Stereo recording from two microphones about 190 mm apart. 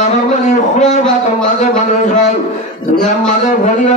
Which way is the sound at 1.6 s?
40° left (ahead or behind).